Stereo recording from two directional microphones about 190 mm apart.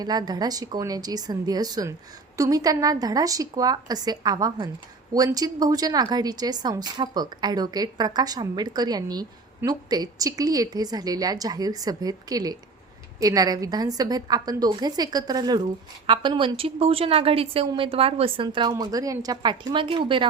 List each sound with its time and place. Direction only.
0.0 s a woman's voice: 20° right (ahead or behind)